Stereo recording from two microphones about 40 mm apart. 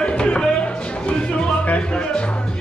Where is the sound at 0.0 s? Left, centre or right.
Left.